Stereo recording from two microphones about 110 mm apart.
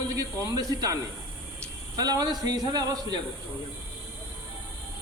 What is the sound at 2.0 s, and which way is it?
Speech, 35° right (ahead or behind).